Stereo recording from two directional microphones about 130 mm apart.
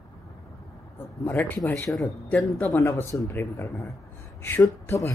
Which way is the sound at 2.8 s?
25° left (ahead or behind).